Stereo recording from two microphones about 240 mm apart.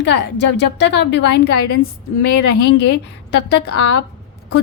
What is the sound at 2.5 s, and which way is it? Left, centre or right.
A woman's voice, left.